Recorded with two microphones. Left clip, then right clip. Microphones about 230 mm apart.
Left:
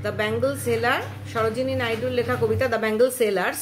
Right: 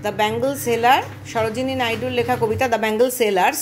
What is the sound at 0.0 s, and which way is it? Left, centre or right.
A woman's voice, centre.